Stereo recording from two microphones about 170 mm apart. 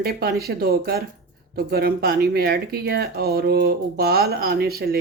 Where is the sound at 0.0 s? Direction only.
65° right (ahead or behind).